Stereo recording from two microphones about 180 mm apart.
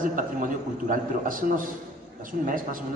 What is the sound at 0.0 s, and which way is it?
A man's voice, 45° right (ahead or behind).